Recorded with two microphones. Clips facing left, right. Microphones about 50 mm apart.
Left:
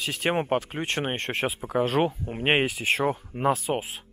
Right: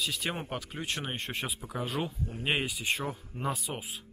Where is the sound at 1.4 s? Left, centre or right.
Left.